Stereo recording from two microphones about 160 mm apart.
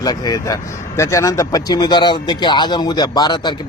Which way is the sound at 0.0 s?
25° left (ahead or behind).